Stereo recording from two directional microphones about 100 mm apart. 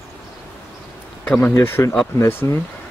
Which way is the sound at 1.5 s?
30° left (ahead or behind).